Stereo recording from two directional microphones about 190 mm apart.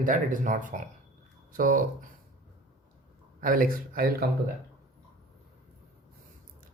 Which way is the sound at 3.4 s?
50° right (ahead or behind).